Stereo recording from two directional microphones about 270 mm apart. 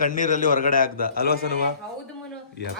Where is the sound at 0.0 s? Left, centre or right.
Left.